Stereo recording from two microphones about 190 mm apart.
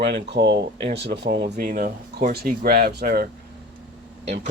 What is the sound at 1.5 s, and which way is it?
Speech, 45° right (ahead or behind).